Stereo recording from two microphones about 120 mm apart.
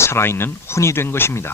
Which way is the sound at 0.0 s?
20° left (ahead or behind).